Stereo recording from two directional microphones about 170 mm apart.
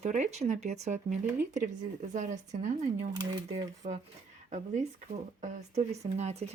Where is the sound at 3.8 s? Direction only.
35° right (ahead or behind).